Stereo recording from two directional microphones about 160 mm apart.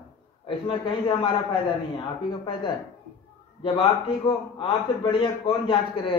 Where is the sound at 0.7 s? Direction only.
30° left (ahead or behind).